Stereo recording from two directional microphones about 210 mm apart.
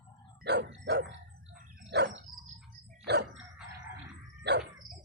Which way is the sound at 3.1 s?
50° right (ahead or behind).